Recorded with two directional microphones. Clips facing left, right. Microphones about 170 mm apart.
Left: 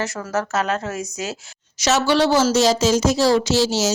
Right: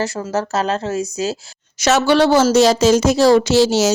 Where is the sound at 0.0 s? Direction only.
30° right (ahead or behind).